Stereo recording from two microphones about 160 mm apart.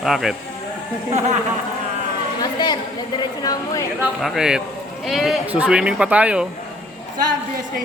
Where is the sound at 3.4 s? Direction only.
20° left (ahead or behind).